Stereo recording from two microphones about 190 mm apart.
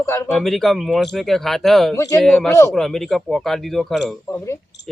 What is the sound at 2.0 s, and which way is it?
Speech, 15° left (ahead or behind).